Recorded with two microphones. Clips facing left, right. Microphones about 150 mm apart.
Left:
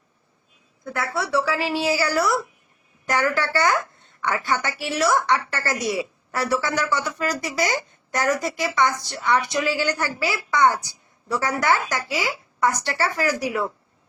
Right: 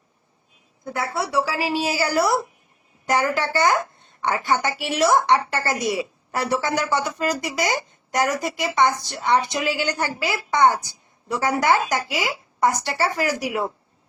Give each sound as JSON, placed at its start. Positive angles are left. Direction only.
{"t": 0.9, "sound": "a woman's voice", "side_deg": -20}